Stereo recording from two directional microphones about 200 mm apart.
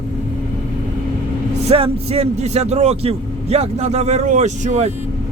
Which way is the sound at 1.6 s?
30° right (ahead or behind).